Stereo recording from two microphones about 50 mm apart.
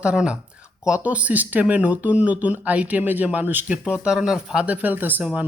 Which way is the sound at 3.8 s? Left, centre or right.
Centre.